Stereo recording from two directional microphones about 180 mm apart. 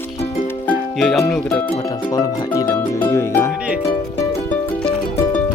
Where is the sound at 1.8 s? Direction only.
20° left (ahead or behind).